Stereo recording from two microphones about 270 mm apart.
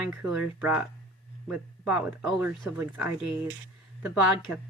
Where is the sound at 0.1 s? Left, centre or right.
Centre.